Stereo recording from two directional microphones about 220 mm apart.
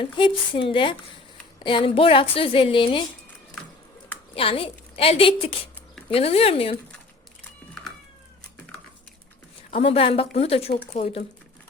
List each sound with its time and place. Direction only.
0.0 s a woman's voice: 25° left (ahead or behind)
4.4 s a woman's voice: 25° left (ahead or behind)
9.7 s a woman's voice: 25° left (ahead or behind)